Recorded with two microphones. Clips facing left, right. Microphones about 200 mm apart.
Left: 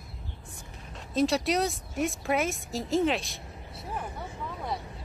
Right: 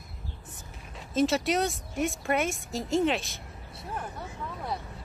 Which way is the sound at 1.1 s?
Centre (ahead or behind).